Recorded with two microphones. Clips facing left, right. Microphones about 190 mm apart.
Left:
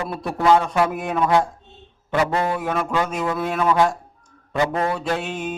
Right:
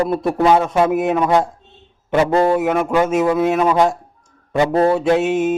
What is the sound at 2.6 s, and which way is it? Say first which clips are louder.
Music: right 6 dB; 20° right (ahead or behind).